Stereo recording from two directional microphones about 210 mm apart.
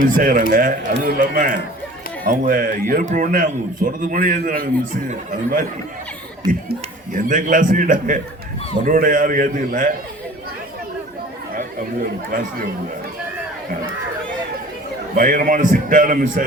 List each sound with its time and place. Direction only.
0.0 s a man's voice: 40° right (ahead or behind)
15.1 s a man's voice: 40° right (ahead or behind)